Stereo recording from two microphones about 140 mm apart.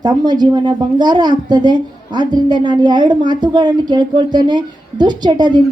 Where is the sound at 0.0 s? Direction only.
30° right (ahead or behind).